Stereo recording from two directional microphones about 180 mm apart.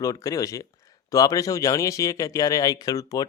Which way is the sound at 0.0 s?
20° left (ahead or behind).